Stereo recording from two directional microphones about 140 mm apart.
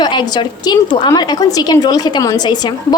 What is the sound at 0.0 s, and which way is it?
A woman's voice, 35° left (ahead or behind).